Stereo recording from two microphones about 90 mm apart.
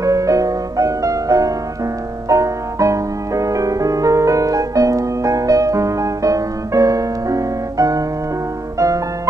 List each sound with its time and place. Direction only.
0.0 s music: 35° right (ahead or behind)